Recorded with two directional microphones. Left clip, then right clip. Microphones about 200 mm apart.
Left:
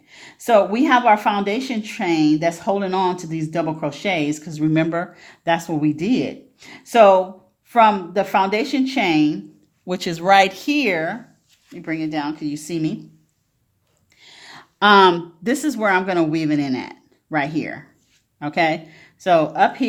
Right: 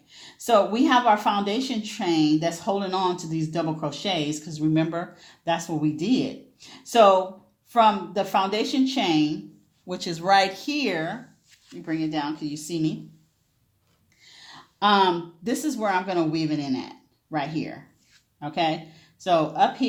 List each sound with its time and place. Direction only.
0.1 s speech: 35° left (ahead or behind)
14.2 s speech: 40° left (ahead or behind)